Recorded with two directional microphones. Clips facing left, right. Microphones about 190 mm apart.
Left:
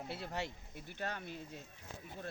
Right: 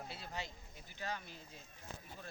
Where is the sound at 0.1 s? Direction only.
65° left (ahead or behind).